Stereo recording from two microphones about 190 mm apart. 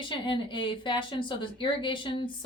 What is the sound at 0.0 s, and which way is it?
A woman's voice, 25° left (ahead or behind).